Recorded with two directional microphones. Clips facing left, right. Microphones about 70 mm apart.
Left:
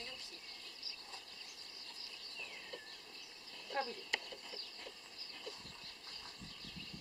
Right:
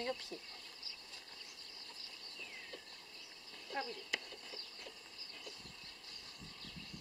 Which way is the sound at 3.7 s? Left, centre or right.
Centre.